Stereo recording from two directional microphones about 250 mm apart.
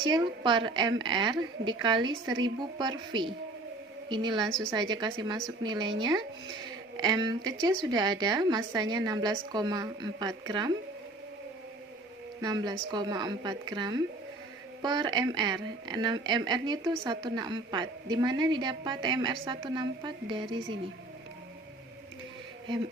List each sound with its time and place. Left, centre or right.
0.0 s a woman's voice: centre
12.4 s a woman's voice: centre